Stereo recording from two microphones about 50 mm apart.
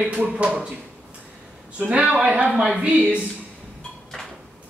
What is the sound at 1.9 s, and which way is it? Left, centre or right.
Speech, right.